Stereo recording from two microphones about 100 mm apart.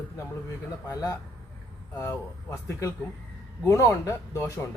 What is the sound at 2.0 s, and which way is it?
Speech, 30° left (ahead or behind).